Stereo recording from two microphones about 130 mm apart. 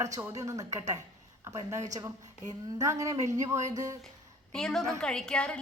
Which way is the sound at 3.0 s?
25° right (ahead or behind).